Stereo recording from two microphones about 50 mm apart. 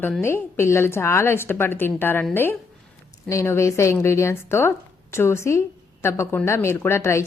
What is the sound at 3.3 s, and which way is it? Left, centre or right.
Speech, left.